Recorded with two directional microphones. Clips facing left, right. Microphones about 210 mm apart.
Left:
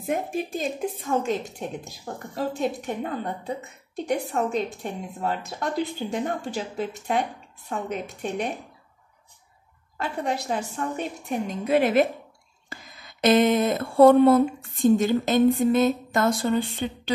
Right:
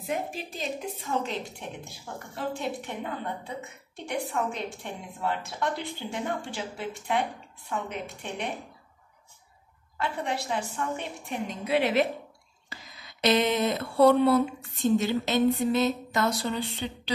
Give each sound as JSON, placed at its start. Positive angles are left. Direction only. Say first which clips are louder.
{"t": 0.0, "sound": "a woman's voice", "louder": "left 5 dB", "side_deg": 50}
{"t": 9.9, "sound": "a woman's voice", "louder": "left 3 dB", "side_deg": 40}